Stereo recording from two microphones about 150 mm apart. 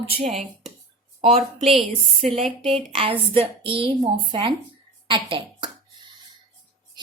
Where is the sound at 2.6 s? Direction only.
40° right (ahead or behind).